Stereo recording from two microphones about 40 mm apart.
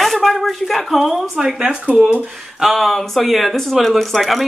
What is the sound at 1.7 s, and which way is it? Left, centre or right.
Speech, right.